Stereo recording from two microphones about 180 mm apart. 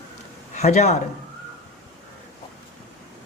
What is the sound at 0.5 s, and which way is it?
Speech, 40° left (ahead or behind).